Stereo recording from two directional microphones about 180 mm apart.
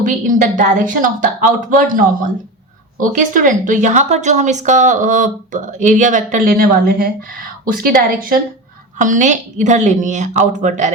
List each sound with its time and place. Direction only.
0.0 s a woman's voice: 45° right (ahead or behind)
9.0 s a woman's voice: 45° right (ahead or behind)